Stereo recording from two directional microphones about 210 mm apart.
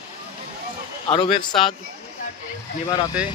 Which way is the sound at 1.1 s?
20° left (ahead or behind).